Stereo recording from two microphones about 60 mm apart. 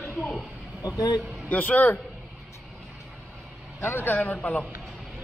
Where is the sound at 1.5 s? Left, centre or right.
Left.